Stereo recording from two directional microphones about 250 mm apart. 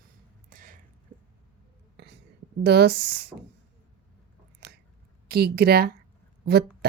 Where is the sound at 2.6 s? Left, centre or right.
Right.